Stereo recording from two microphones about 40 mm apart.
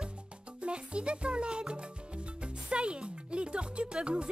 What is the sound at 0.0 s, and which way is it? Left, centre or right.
Music, right.